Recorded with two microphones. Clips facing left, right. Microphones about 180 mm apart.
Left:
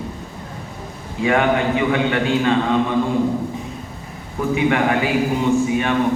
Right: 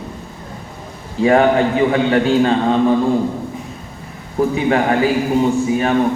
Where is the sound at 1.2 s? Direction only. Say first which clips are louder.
Right 5 dB; 35° right (ahead or behind).